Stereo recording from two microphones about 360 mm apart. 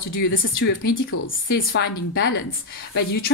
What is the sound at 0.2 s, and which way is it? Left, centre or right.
A woman's voice, left.